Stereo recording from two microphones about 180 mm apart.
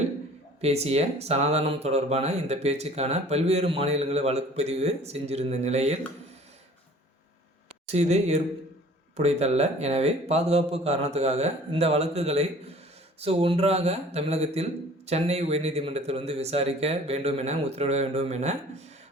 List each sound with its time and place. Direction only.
0.6 s speech: 35° right (ahead or behind)
7.9 s speech: 35° right (ahead or behind)